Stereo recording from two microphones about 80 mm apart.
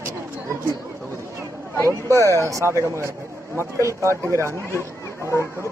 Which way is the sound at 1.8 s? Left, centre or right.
Right.